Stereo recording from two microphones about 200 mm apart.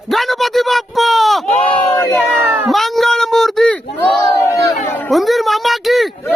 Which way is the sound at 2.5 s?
5° right (ahead or behind).